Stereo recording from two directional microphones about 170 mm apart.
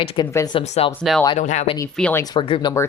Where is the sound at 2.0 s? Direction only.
5° left (ahead or behind).